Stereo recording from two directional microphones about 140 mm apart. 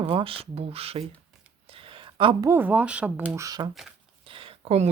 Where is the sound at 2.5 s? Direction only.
15° right (ahead or behind).